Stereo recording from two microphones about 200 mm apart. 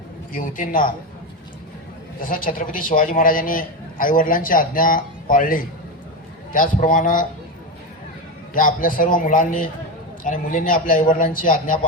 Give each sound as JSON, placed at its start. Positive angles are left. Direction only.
{"t": 0.3, "sound": "a man's voice", "side_deg": 45}
{"t": 2.2, "sound": "a man's voice", "side_deg": 45}
{"t": 8.5, "sound": "a man's voice", "side_deg": 45}